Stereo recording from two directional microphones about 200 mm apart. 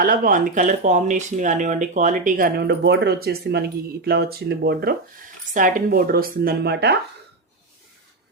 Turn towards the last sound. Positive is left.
turn(degrees=-55)  # may be behind; listen again after turning